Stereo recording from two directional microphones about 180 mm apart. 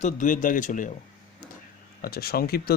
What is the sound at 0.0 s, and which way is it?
Speech, 45° left (ahead or behind).